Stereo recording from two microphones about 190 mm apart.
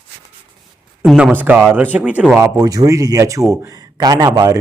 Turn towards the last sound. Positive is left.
turn(degrees=-20)  # may be behind; listen again after turning